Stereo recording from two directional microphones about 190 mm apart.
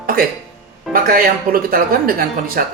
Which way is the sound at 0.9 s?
50° right (ahead or behind).